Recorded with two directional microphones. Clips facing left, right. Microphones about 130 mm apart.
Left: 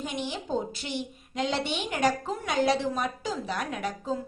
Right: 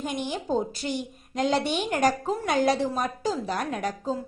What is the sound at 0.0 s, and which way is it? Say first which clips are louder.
A woman's voice: right 3 dB; 50° right (ahead or behind).